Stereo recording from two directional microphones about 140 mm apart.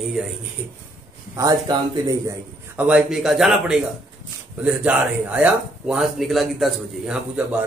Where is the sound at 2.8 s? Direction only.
10° right (ahead or behind).